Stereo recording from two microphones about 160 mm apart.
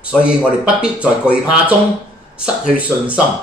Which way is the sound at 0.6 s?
5° right (ahead or behind).